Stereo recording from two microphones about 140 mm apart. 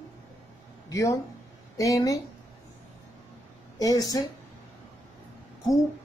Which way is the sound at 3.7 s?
25° left (ahead or behind).